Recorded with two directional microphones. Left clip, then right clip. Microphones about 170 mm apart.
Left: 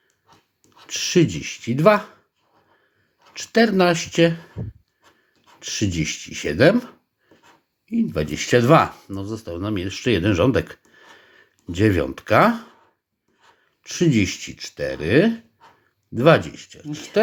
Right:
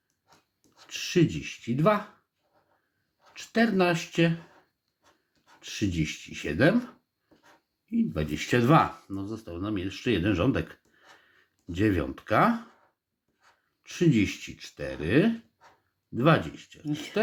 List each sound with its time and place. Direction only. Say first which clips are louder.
0.9 s speech: left 7 dB; 35° left (ahead or behind)
3.3 s speech: left 8 dB; 30° left (ahead or behind)
5.5 s speech: left 6 dB; 30° left (ahead or behind)
13.8 s speech: left 5 dB; 30° left (ahead or behind)